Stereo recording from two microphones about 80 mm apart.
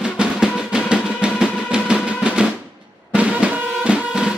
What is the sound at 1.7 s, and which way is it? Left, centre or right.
Music, centre.